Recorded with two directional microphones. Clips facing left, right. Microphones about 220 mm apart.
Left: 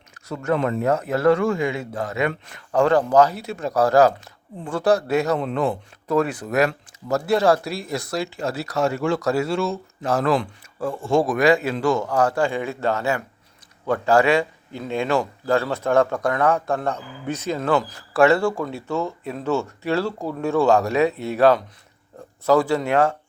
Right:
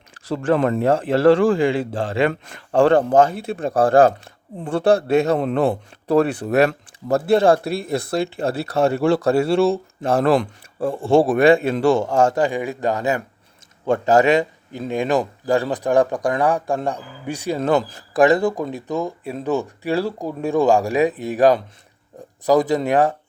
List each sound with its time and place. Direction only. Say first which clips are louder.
0.4 s speech: right 3 dB; 30° right (ahead or behind)
3.2 s speech: right 1 dB; 50° right (ahead or behind)
4.0 s a man's voice: right 2 dB; 30° right (ahead or behind)
5.4 s speech: right 4 dB; 55° right (ahead or behind)
6.1 s speech: right 4 dB; 30° right (ahead or behind)
6.7 s speech: right 4 dB; 55° right (ahead or behind)
9.0 s speech: right 5 dB; 30° right (ahead or behind)
11.8 s a man's voice: right 4 dB; 30° right (ahead or behind); by 17.6 s 15° right (ahead or behind)
17.6 s speech: right 3 dB; 40° right (ahead or behind)
18.1 s a man's voice: right 1 dB; 15° right (ahead or behind)